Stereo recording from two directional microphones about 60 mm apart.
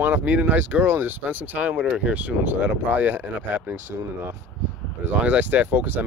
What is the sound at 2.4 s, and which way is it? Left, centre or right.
Speech, right.